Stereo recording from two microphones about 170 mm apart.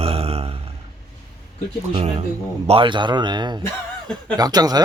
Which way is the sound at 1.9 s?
35° right (ahead or behind).